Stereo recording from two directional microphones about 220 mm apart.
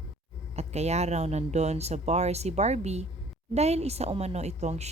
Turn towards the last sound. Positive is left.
turn(degrees=-30)  # may be behind; listen again after turning